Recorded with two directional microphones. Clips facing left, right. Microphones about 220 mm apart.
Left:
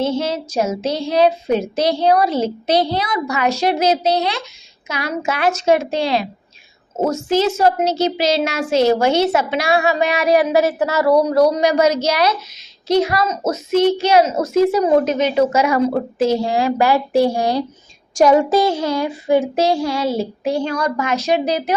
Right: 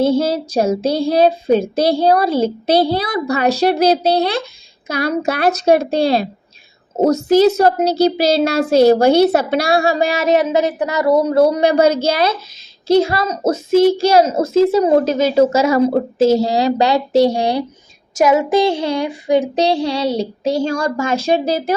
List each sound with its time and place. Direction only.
0.0 s child singing: 35° right (ahead or behind)
8.7 s a woman's voice: 35° right (ahead or behind)
12.9 s child singing: 30° right (ahead or behind)
16.5 s a woman's voice: 30° right (ahead or behind)
17.3 s child singing: 15° right (ahead or behind)
19.8 s child singing: 35° right (ahead or behind)
20.8 s a woman's voice: 25° right (ahead or behind)